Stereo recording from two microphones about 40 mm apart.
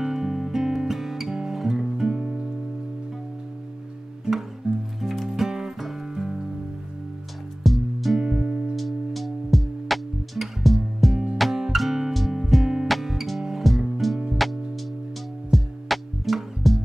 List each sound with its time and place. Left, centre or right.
0.0 s guitar: centre
4.6 s music: right
5.0 s music: centre
7.6 s music: centre
8.2 s music: centre
8.7 s music: centre
15.5 s music: centre